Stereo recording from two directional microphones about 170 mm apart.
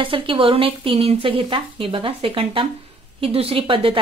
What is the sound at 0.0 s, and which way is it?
Speech, 30° right (ahead or behind).